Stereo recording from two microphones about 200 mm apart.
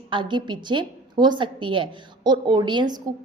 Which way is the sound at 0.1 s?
25° right (ahead or behind).